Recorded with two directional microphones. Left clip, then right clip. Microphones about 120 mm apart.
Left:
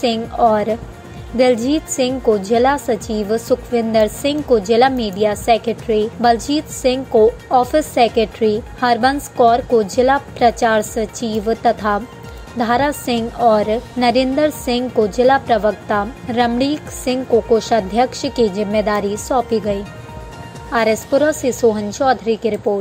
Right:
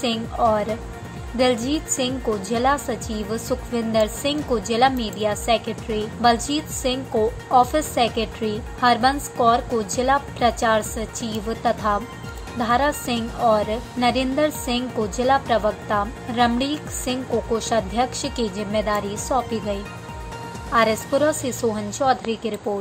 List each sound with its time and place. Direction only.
0.0 s a woman's voice: 35° left (ahead or behind)